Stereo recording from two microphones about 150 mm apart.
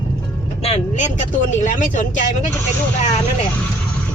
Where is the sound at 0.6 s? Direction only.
45° left (ahead or behind).